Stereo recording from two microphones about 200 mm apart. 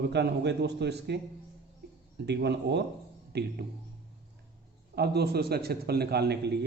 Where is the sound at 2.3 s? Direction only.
55° right (ahead or behind).